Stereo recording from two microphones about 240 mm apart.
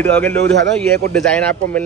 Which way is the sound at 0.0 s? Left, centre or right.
Centre.